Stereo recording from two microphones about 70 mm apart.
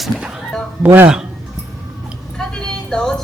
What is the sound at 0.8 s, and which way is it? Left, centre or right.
Speech, right.